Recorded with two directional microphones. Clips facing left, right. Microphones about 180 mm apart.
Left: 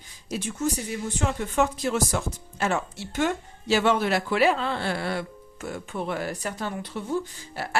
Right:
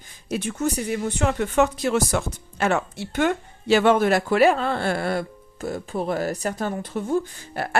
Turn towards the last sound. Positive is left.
turn(degrees=-50)  # may be behind; listen again after turning